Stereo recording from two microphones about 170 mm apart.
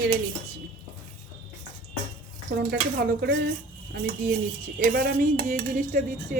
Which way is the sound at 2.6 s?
70° right (ahead or behind).